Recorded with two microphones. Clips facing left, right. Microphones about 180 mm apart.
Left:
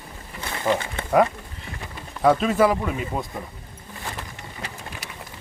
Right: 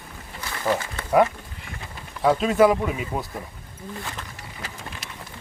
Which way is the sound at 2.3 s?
Centre (ahead or behind).